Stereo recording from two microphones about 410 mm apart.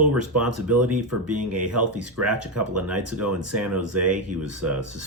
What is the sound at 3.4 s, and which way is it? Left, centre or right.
Speech, right.